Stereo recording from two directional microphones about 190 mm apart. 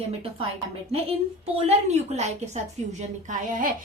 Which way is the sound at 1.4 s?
35° right (ahead or behind).